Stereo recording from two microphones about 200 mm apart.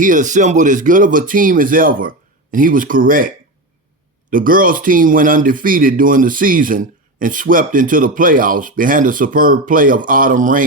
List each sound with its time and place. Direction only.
0.0 s speech: 40° right (ahead or behind)